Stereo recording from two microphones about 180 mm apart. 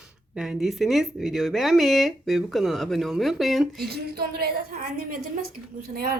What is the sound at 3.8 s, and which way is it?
A woman's voice, 60° right (ahead or behind).